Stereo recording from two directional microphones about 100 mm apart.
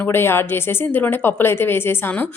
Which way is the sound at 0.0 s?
25° left (ahead or behind).